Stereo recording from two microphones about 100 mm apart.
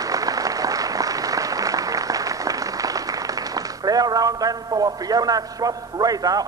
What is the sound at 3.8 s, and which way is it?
A man's voice, 40° right (ahead or behind).